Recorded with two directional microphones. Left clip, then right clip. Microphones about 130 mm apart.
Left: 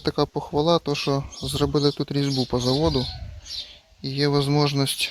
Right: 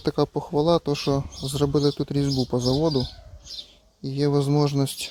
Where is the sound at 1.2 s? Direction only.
10° right (ahead or behind).